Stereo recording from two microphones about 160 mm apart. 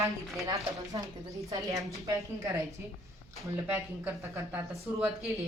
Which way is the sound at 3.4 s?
15° right (ahead or behind).